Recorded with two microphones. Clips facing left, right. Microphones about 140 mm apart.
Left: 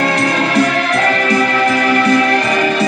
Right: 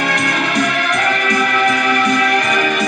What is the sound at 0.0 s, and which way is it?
Music, 30° left (ahead or behind).